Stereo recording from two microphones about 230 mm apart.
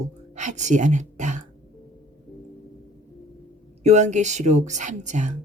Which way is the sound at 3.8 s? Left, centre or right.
Right.